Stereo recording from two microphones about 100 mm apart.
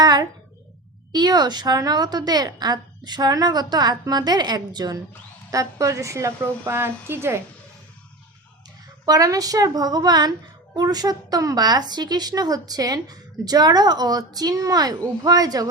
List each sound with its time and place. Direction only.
0.0 s a child's voice: 40° right (ahead or behind); by 7.3 s 25° right (ahead or behind)
9.0 s a woman's voice: 35° right (ahead or behind)